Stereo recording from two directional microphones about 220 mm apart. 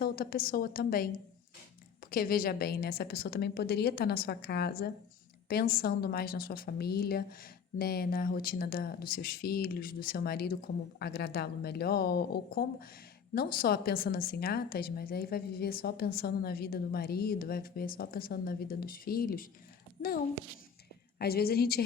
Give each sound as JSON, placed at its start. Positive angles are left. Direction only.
{"t": 0.0, "sound": "a woman's voice", "side_deg": 40}
{"t": 21.2, "sound": "a woman's voice", "side_deg": 45}